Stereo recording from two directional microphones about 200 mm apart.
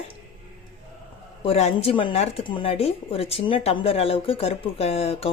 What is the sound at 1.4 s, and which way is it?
Speech, 30° left (ahead or behind).